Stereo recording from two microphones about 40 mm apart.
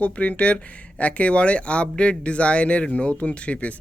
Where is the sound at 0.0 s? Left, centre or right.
Left.